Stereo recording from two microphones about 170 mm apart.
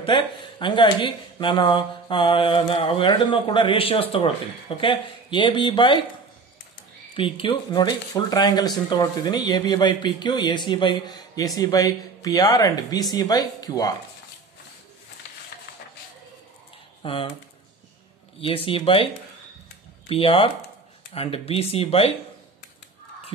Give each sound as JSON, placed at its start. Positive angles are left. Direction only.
{"t": 0.0, "sound": "speech", "side_deg": 30}
{"t": 7.2, "sound": "speech", "side_deg": 30}
{"t": 17.0, "sound": "speech", "side_deg": 30}
{"t": 18.4, "sound": "speech", "side_deg": 35}
{"t": 20.1, "sound": "speech", "side_deg": 30}